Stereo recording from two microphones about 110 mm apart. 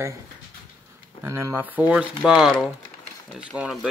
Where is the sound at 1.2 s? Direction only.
20° right (ahead or behind).